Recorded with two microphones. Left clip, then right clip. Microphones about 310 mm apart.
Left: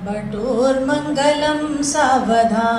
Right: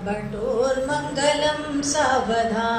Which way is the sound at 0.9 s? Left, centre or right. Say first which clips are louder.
Left 5 dB; left.